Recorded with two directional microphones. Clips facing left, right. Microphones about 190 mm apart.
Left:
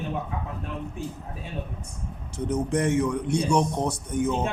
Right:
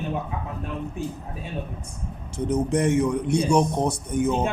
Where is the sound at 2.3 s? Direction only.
20° right (ahead or behind).